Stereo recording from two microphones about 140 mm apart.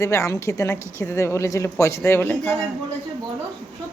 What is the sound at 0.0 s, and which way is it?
A woman's voice, 20° left (ahead or behind).